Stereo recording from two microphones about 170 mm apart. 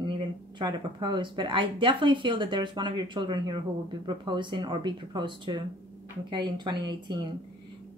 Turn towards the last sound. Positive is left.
turn(degrees=-25)  # may be behind; listen again after turning